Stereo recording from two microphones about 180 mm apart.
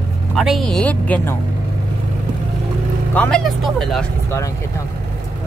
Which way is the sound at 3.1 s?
5° left (ahead or behind).